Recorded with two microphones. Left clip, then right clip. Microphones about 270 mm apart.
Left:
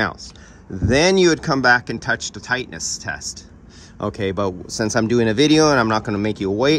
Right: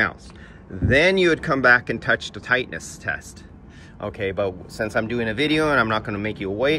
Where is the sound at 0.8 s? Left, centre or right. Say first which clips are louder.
Left 2 dB; centre.